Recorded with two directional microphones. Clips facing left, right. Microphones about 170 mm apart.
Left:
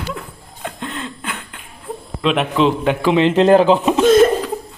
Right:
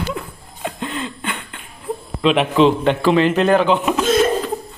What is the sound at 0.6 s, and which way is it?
Laughter, centre (ahead or behind).